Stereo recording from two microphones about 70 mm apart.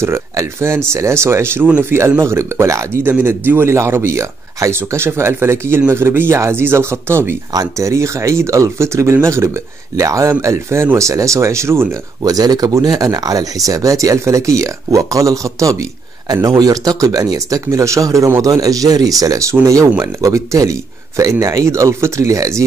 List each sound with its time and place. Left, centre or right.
0.0 s a man's voice: right
3.0 s a man's voice: right
7.5 s speech: right
12.2 s speech: right
16.3 s speech: right